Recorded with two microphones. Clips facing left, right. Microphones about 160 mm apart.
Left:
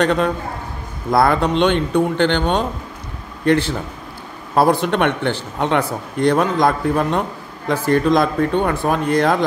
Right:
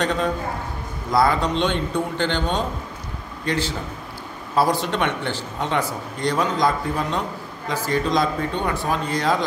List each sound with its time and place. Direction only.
0.0 s speech: 65° left (ahead or behind)